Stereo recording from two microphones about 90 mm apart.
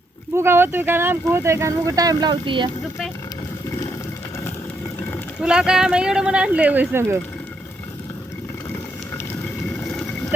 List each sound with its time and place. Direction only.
0.3 s speech: 25° right (ahead or behind)
2.3 s speech: 65° right (ahead or behind)
5.4 s speech: 10° right (ahead or behind)
6.9 s speech: 25° right (ahead or behind)
9.8 s boat: 5° left (ahead or behind)